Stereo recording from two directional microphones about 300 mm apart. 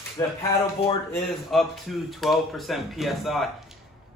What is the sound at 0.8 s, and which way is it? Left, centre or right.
Speech, centre.